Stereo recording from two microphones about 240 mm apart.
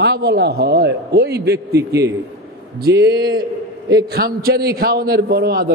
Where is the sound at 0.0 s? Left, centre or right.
Right.